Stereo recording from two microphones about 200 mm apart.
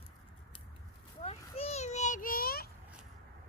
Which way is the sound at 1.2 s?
30° left (ahead or behind).